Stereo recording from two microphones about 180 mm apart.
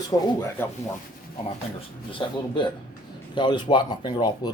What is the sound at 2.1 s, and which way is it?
Speech, 25° left (ahead or behind).